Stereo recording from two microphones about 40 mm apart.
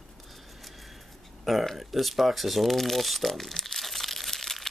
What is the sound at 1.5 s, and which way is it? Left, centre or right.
Speech, centre.